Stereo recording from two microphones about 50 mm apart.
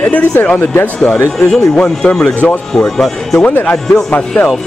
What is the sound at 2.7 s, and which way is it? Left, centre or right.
Speech, centre.